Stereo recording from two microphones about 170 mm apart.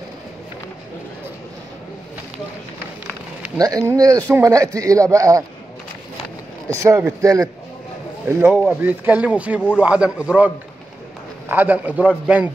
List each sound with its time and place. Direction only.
3.5 s speech: 20° right (ahead or behind)
6.7 s speech: 15° right (ahead or behind)